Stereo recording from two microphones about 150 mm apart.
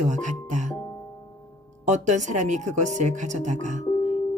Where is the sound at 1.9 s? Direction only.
50° right (ahead or behind).